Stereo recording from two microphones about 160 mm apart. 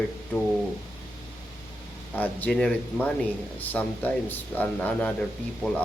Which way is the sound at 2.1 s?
10° left (ahead or behind).